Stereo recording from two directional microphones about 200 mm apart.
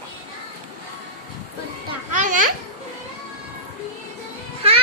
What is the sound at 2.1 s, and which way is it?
Children playing, 40° right (ahead or behind).